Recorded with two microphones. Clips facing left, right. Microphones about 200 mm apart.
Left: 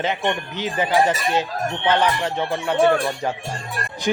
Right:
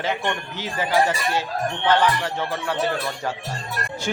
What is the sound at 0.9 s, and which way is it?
Music, 20° left (ahead or behind).